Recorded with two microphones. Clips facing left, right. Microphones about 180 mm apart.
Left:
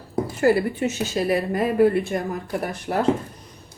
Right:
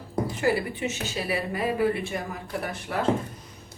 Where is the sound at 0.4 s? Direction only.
45° left (ahead or behind).